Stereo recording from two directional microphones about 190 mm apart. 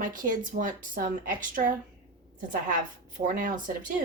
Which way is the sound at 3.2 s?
45° right (ahead or behind).